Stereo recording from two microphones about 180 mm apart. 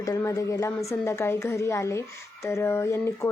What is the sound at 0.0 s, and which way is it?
A woman's voice, 20° left (ahead or behind).